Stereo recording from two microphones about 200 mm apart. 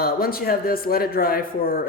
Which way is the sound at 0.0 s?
50° left (ahead or behind).